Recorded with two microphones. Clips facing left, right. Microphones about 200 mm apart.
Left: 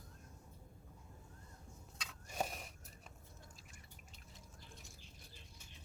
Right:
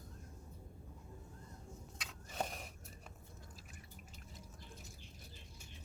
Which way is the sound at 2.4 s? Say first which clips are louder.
Even; centre (ahead or behind).